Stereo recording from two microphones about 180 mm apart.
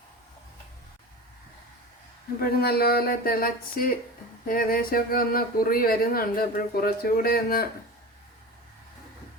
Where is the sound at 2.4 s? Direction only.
60° left (ahead or behind).